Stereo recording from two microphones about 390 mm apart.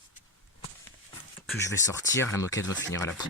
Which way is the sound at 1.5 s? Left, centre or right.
Centre.